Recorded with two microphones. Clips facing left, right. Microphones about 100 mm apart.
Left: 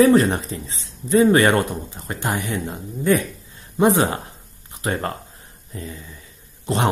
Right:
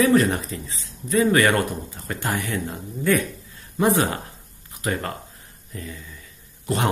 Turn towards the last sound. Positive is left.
turn(degrees=25)  # may be behind; listen again after turning